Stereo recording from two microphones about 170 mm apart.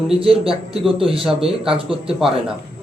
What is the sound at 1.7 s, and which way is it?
Speech, 30° right (ahead or behind).